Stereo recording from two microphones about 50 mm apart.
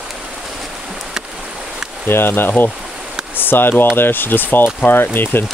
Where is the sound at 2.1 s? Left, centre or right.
Left.